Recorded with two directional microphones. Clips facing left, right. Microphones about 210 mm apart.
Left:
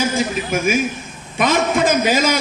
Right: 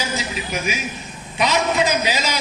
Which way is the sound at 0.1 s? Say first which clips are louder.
Left 6 dB; 50° left (ahead or behind).